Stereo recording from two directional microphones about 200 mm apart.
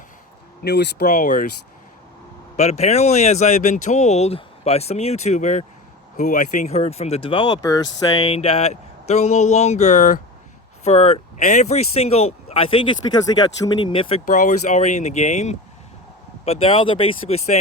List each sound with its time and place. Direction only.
0.6 s speech: 55° left (ahead or behind)
1.0 s speech: 40° left (ahead or behind)
2.6 s speech: 30° left (ahead or behind)